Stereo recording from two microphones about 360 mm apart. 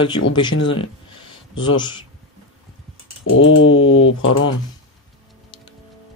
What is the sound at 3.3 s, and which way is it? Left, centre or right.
Typing, left.